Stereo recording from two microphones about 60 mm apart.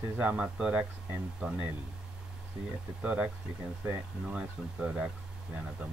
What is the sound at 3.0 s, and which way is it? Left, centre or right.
Speech, right.